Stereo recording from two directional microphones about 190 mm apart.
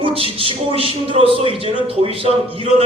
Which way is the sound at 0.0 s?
30° right (ahead or behind).